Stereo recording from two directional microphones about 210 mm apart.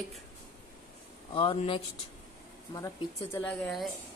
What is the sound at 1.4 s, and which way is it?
Speech, 25° left (ahead or behind).